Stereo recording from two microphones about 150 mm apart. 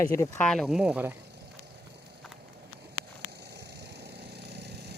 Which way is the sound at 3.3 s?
90° right.